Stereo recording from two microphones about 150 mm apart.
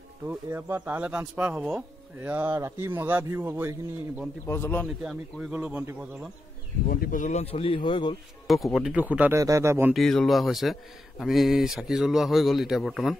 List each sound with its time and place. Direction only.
0.3 s speech: 15° right (ahead or behind)
4.5 s speech: 15° left (ahead or behind)
4.8 s speech: 5° right (ahead or behind)
6.9 s speech: 65° left (ahead or behind); by 8.2 s 30° left (ahead or behind)
8.5 s speech: centre (ahead or behind); by 9.9 s 15° right (ahead or behind)
9.9 s speech: centre (ahead or behind)